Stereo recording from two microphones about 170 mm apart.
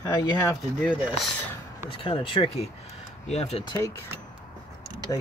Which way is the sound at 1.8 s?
30° left (ahead or behind).